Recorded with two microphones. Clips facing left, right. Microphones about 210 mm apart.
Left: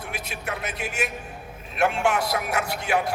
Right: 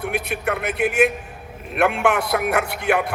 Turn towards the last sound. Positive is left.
turn(degrees=-60)  # may be behind; listen again after turning